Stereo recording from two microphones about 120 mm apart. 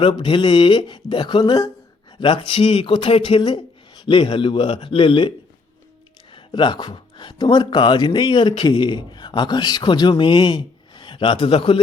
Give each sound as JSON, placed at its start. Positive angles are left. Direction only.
{"t": 0.0, "sound": "speech", "side_deg": 40}
{"t": 6.3, "sound": "speech", "side_deg": 40}